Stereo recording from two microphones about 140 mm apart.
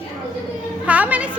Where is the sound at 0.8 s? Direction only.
10° right (ahead or behind).